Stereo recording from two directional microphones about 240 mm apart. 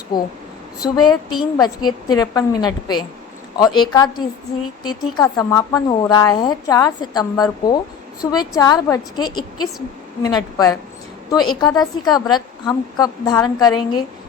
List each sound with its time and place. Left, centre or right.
0.1 s speech: centre